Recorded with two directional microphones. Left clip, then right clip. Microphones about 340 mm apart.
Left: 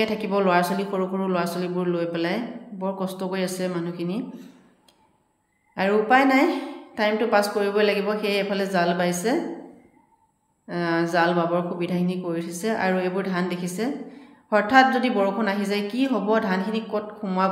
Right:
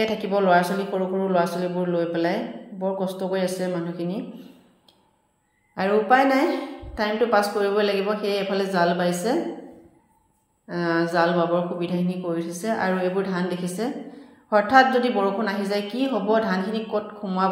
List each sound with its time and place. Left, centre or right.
0.0 s speech: centre
5.8 s speech: centre
10.8 s a woman's voice: centre